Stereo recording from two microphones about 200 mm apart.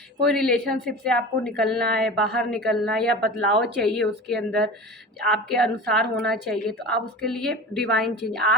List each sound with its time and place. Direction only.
0.3 s a woman's voice: 5° left (ahead or behind)
3.2 s speech: 55° right (ahead or behind)
3.8 s a woman's voice: centre (ahead or behind)